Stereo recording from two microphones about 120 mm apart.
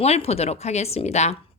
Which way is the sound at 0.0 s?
60° left (ahead or behind).